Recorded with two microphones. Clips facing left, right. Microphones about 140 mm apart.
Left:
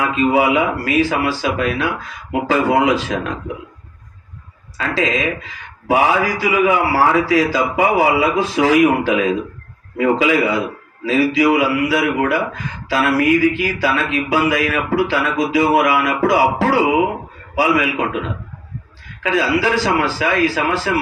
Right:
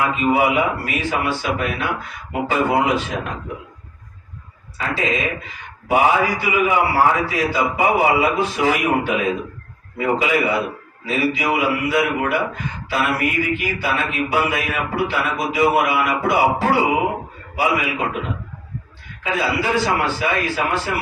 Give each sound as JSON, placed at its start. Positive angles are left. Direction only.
{"t": 0.0, "sound": "a man's voice", "side_deg": 90}
{"t": 4.8, "sound": "a man's voice", "side_deg": 90}